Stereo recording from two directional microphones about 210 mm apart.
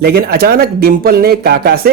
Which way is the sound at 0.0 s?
45° right (ahead or behind).